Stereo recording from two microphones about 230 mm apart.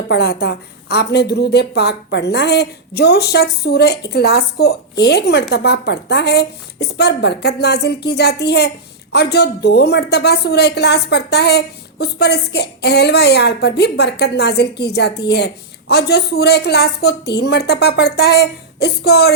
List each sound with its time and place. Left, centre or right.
0.1 s a woman's voice: left